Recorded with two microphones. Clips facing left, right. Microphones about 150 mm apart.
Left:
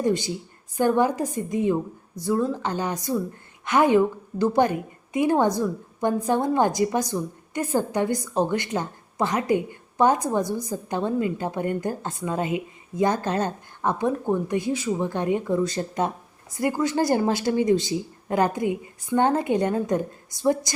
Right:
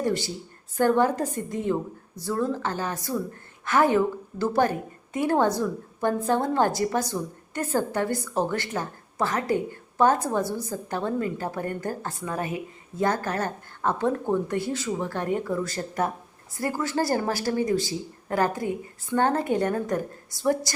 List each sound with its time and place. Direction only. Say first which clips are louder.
0.0 s a woman's voice: left 3 dB; 15° left (ahead or behind)